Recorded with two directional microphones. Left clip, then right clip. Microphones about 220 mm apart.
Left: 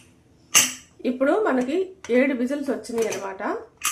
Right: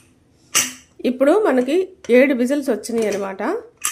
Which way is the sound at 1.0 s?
50° right (ahead or behind).